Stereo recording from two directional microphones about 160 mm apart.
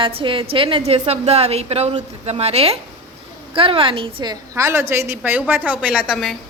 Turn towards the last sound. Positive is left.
turn(degrees=0)  # may be behind; listen again after turning